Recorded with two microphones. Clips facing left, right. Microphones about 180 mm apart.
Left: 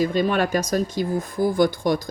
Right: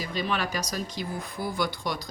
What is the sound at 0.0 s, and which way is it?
Speech, 50° left (ahead or behind).